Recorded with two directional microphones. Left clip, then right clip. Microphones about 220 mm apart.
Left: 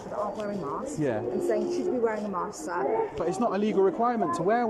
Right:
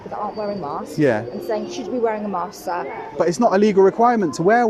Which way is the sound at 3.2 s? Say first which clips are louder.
Right 11 dB; 30° right (ahead or behind).